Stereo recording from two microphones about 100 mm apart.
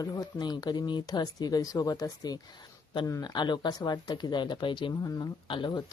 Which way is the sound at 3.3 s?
50° left (ahead or behind).